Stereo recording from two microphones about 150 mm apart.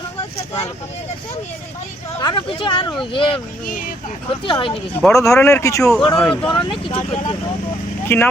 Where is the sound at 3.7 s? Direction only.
65° left (ahead or behind).